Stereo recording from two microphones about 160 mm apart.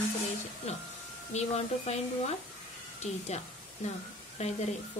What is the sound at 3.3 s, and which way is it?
Speech, 45° left (ahead or behind).